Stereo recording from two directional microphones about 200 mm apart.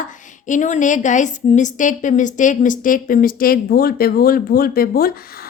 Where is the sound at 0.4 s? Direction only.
40° left (ahead or behind).